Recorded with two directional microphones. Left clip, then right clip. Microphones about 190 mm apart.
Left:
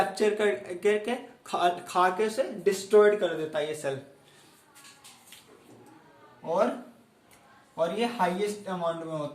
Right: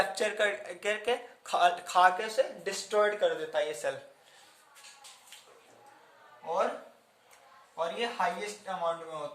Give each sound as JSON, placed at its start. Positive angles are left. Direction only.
{"t": 0.1, "sound": "speech", "side_deg": -20}
{"t": 7.8, "sound": "a man's voice", "side_deg": -5}